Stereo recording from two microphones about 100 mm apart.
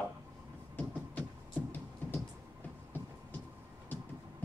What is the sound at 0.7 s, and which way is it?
Music, 15° left (ahead or behind).